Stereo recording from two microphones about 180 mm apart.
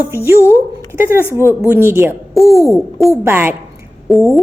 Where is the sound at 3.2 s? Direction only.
10° right (ahead or behind).